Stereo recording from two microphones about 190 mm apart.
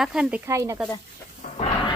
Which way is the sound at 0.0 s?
5° right (ahead or behind).